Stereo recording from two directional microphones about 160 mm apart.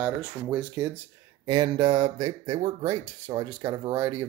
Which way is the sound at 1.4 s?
25° right (ahead or behind).